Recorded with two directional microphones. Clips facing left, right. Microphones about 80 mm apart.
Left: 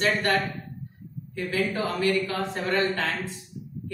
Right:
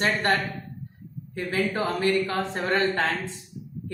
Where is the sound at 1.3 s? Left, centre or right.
Right.